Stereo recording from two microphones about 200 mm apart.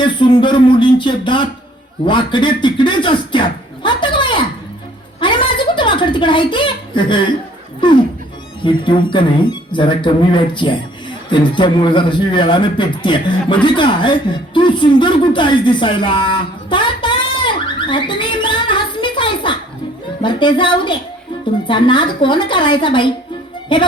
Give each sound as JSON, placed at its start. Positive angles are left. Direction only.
{"t": 0.0, "sound": "speech", "side_deg": 25}
{"t": 5.2, "sound": "a sound", "side_deg": 25}
{"t": 7.8, "sound": "a man's voice", "side_deg": 25}